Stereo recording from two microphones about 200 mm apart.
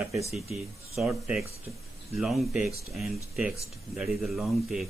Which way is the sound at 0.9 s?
5° right (ahead or behind).